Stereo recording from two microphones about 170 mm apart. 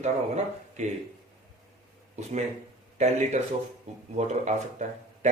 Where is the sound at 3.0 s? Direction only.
40° right (ahead or behind).